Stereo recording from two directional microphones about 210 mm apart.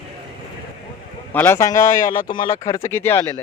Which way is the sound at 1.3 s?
10° left (ahead or behind).